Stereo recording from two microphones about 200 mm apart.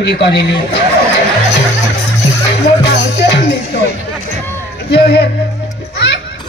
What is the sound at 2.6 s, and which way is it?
Music, 60° left (ahead or behind).